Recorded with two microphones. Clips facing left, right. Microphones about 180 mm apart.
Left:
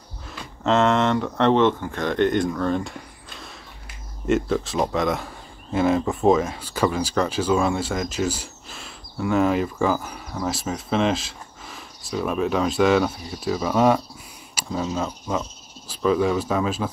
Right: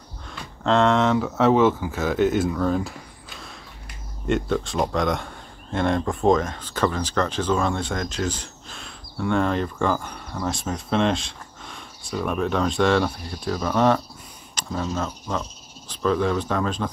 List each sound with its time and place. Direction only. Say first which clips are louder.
0.3 s speech: even; centre (ahead or behind)